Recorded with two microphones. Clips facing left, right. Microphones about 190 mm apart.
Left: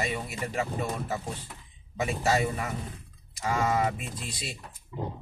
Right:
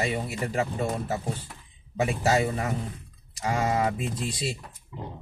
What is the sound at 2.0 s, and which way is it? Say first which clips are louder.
A man's voice: right 3 dB; 30° right (ahead or behind).